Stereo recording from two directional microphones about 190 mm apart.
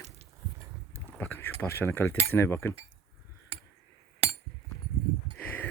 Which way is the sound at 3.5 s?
30° right (ahead or behind).